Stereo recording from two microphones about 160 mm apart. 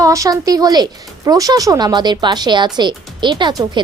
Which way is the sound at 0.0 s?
20° right (ahead or behind).